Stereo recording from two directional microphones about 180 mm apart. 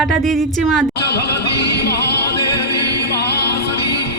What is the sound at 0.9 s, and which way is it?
Music, 70° left (ahead or behind).